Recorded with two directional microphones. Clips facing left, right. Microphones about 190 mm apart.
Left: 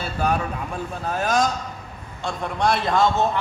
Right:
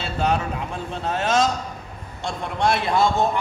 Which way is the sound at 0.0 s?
25° right (ahead or behind).